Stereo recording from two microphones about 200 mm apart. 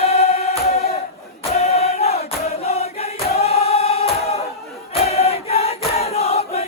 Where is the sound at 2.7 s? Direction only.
30° left (ahead or behind).